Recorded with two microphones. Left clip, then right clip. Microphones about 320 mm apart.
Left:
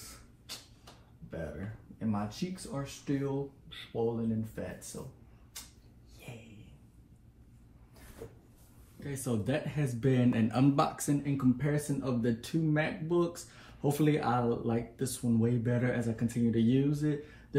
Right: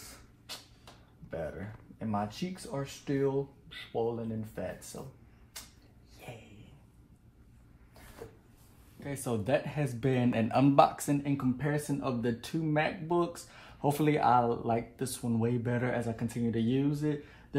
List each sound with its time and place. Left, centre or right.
2.2 s speech: right
9.0 s speech: right